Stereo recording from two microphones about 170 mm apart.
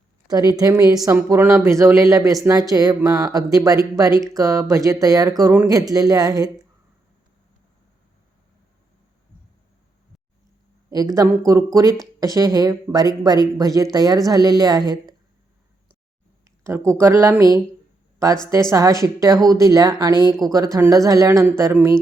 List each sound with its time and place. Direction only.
0.3 s speech: 20° right (ahead or behind)
10.8 s speech: 20° right (ahead or behind)
16.4 s speech: 15° right (ahead or behind)
18.7 s speech: 20° right (ahead or behind)